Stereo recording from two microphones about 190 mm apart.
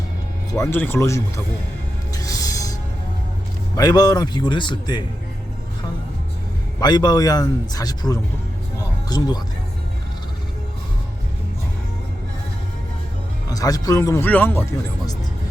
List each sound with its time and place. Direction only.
0.5 s speech: 15° left (ahead or behind)
2.1 s music: 20° left (ahead or behind)
3.8 s a man's voice: 20° left (ahead or behind)
6.7 s a man's voice: 20° left (ahead or behind)
13.5 s speech: 20° left (ahead or behind)